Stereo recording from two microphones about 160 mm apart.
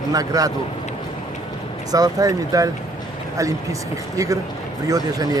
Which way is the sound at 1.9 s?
20° right (ahead or behind).